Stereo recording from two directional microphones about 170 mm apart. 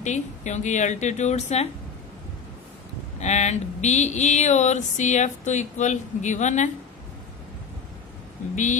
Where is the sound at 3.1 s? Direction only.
40° left (ahead or behind).